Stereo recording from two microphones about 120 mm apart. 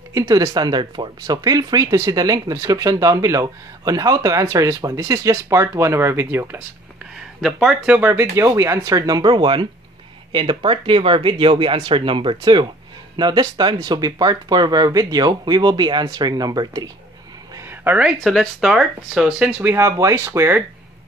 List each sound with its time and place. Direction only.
0.1 s speech: 25° right (ahead or behind)
7.4 s speech: 5° right (ahead or behind)
8.1 s speech: 20° right (ahead or behind)
17.6 s a sound: 15° right (ahead or behind)
18.2 s speech: centre (ahead or behind)
19.7 s speech: 25° right (ahead or behind)